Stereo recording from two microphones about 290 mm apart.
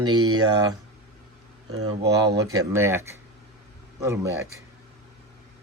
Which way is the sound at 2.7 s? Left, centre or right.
Centre.